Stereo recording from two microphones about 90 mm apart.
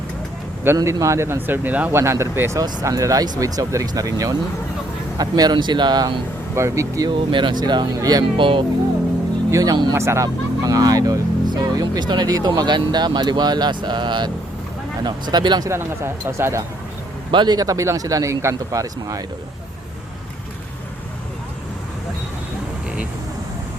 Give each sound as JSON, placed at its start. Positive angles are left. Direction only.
{"t": 0.9, "sound": "speech", "side_deg": -35}
{"t": 2.0, "sound": "speech", "side_deg": -30}
{"t": 2.6, "sound": "speech", "side_deg": -40}
{"t": 6.6, "sound": "speech", "side_deg": -35}
{"t": 7.1, "sound": "speech", "side_deg": -60}
{"t": 8.4, "sound": "speech", "side_deg": -70}
{"t": 9.5, "sound": "speech", "side_deg": -40}
{"t": 15.7, "sound": "speech", "side_deg": -25}
{"t": 17.3, "sound": "speech", "side_deg": -55}